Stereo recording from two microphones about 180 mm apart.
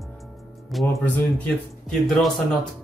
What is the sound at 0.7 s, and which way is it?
Speech, centre (ahead or behind).